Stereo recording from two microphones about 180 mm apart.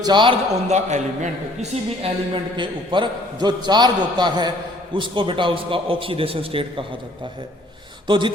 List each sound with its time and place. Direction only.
0.0 s a man's voice: 25° right (ahead or behind)
0.7 s a man's voice: 40° right (ahead or behind)
8.0 s speech: 25° right (ahead or behind)